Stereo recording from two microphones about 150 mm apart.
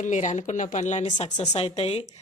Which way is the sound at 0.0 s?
55° left (ahead or behind).